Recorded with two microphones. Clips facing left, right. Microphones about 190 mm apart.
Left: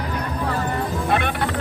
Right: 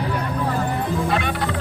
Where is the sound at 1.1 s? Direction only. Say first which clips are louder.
Left 4 dB; 55° left (ahead or behind).